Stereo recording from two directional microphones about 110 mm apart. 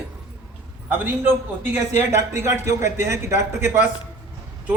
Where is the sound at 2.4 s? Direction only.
25° right (ahead or behind).